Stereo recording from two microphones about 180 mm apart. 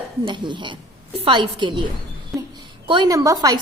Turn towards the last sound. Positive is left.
turn(degrees=-20)  # may be behind; listen again after turning